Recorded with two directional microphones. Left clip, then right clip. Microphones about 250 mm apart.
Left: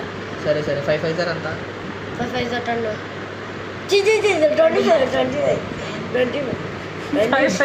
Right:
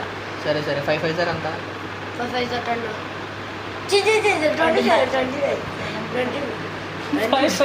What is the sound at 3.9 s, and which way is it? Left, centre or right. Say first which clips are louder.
Speech: left 2 dB; centre.